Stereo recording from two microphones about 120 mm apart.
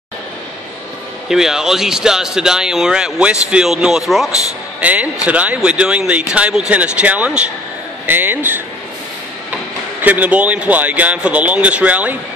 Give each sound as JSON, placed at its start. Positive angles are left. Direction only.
{"t": 1.3, "sound": "speech", "side_deg": -5}
{"t": 10.0, "sound": "speech", "side_deg": -15}